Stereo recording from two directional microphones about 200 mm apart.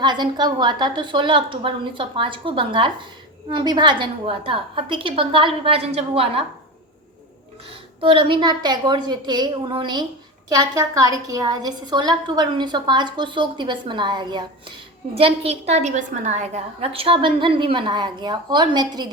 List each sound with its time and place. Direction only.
0.0 s a woman's voice: 20° right (ahead or behind)
7.7 s a woman's voice: 25° right (ahead or behind)